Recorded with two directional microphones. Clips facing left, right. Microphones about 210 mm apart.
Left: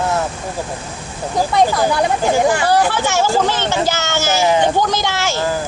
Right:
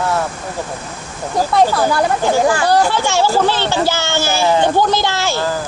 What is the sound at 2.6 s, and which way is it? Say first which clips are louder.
Speech: right 1 dB; 10° left (ahead or behind).